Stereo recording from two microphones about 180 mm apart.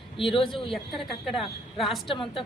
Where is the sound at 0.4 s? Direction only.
Centre (ahead or behind).